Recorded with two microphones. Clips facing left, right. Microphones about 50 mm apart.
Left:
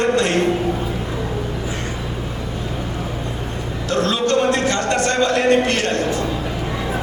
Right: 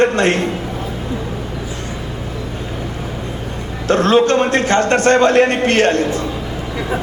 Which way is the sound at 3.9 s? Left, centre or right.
Right.